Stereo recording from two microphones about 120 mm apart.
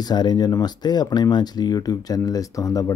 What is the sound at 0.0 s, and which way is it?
Speech, 35° left (ahead or behind).